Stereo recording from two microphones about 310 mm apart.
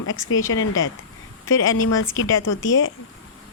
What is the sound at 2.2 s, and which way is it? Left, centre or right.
Speech, left.